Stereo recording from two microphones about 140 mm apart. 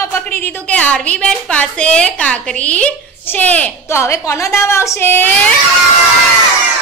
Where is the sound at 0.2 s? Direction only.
15° left (ahead or behind).